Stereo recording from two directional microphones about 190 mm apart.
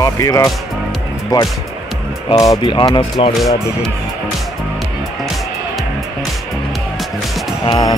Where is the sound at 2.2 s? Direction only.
20° left (ahead or behind).